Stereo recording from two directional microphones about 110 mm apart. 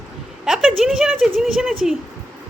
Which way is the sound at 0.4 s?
5° right (ahead or behind).